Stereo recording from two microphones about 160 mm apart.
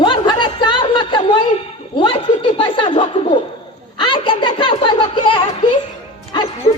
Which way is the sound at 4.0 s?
30° left (ahead or behind).